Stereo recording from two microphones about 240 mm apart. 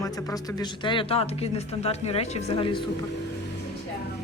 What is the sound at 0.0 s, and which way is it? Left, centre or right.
Speech, centre.